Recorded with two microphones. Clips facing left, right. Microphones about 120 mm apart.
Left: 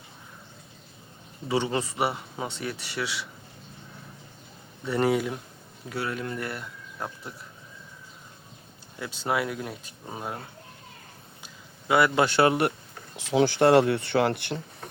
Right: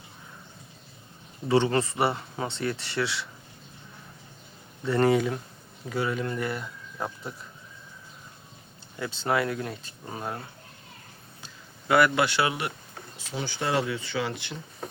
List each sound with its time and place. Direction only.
1.5 s speech: 10° left (ahead or behind)
4.9 s speech: 10° left (ahead or behind)
9.0 s speech: 10° left (ahead or behind)
11.4 s a sound: 20° left (ahead or behind)
12.2 s speech: 45° left (ahead or behind)
13.1 s speech: 90° left; by 14.6 s 60° left (ahead or behind)